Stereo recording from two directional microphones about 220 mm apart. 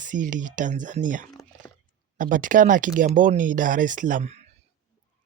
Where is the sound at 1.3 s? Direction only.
15° left (ahead or behind).